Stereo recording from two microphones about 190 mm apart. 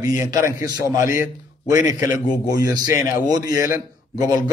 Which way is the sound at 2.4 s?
20° right (ahead or behind).